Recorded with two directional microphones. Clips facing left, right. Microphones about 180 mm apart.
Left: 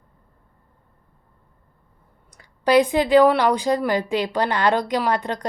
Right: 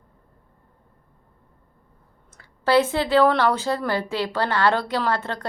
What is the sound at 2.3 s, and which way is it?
A woman's voice, 15° left (ahead or behind).